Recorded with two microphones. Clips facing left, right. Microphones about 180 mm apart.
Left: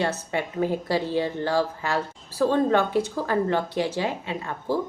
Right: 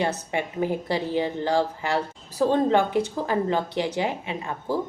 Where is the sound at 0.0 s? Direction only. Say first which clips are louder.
Even; 15° right (ahead or behind).